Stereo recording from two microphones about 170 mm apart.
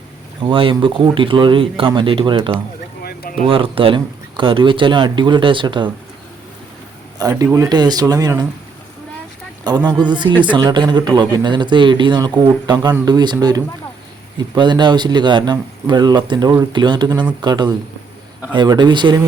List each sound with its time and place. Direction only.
0.4 s speech: 30° right (ahead or behind)
3.0 s a sound: 60° left (ahead or behind)
3.4 s speech: 30° right (ahead or behind)
7.2 s speech: 20° right (ahead or behind)
9.6 s speech: 25° right (ahead or behind)